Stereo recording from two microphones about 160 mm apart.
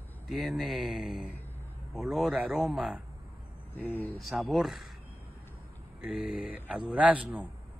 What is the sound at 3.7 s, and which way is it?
Speech, 10° left (ahead or behind).